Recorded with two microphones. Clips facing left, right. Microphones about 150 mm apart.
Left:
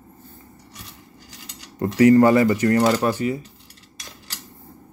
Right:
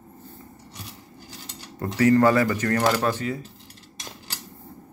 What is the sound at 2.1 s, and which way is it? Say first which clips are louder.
Speech: left 2 dB; 15° left (ahead or behind).